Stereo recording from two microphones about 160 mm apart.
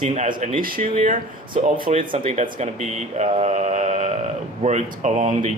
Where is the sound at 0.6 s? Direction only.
60° right (ahead or behind).